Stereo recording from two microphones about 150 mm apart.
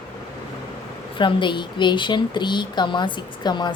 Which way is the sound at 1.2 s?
30° left (ahead or behind).